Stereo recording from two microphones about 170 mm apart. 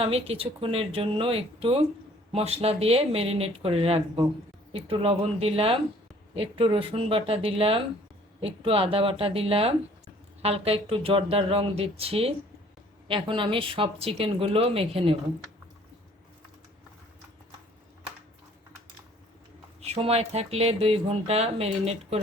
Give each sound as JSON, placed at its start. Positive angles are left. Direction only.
{"t": 0.0, "sound": "speech", "side_deg": -35}
{"t": 19.8, "sound": "speech", "side_deg": -35}